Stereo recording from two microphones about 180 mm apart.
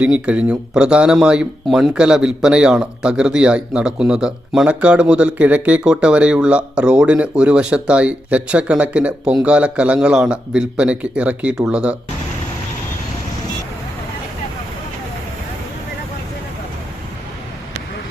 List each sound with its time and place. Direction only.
0.0 s speech: 5° right (ahead or behind)